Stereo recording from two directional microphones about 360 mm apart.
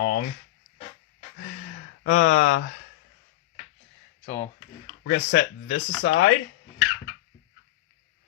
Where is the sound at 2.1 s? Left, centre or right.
Left.